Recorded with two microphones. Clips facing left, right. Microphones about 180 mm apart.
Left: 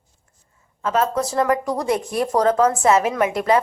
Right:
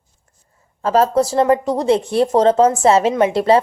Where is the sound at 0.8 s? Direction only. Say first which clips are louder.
Right 6 dB; 35° right (ahead or behind).